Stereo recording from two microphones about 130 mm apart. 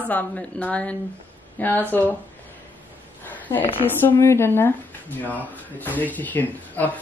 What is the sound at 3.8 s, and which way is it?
Speech, 20° left (ahead or behind).